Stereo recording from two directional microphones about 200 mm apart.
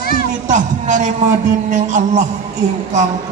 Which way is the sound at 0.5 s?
40° right (ahead or behind).